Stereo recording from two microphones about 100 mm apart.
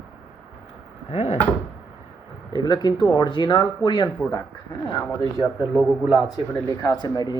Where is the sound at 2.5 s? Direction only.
45° left (ahead or behind).